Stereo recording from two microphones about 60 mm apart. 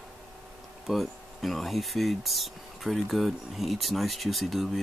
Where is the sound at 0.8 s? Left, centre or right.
Centre.